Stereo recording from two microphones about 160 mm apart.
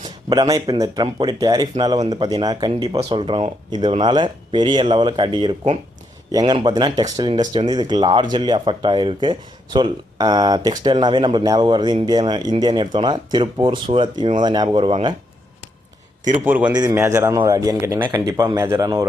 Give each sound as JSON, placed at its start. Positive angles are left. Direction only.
{"t": 0.3, "sound": "speech", "side_deg": -25}
{"t": 16.4, "sound": "a man's voice", "side_deg": -10}